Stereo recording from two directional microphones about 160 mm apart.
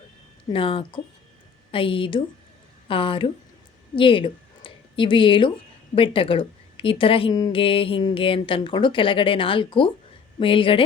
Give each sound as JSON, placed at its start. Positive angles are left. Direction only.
{"t": 0.5, "sound": "a woman's voice", "side_deg": 35}